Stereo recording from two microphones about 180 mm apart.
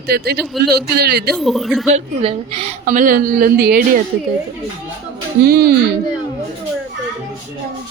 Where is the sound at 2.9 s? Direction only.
50° right (ahead or behind).